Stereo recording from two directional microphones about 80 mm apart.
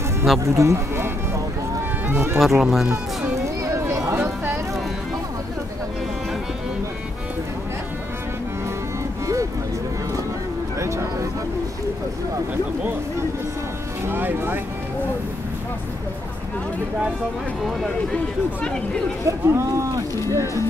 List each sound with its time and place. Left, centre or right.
0.4 s speech: right
2.3 s speech: centre
3.6 s a sound: right
10.8 s speech: right
14.0 s speech: right
19.2 s speech: right